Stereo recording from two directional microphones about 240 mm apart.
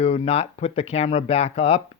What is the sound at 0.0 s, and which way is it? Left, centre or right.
Speech, left.